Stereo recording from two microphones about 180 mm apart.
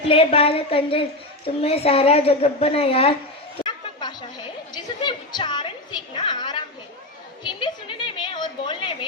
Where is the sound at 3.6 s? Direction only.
25° left (ahead or behind).